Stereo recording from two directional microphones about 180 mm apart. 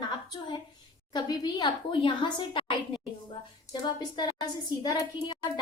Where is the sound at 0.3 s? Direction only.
25° left (ahead or behind).